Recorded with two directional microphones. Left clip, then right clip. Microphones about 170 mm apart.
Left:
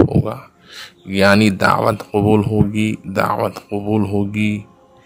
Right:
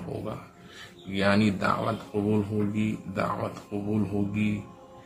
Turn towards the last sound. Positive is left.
turn(degrees=70)  # may be behind; listen again after turning